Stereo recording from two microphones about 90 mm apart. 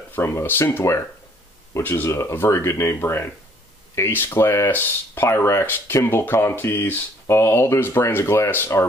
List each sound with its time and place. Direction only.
0.1 s speech: 30° left (ahead or behind)